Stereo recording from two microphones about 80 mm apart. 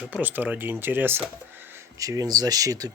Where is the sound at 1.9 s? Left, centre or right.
Right.